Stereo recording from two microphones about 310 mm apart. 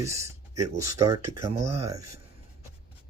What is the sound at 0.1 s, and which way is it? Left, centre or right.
Speech, centre.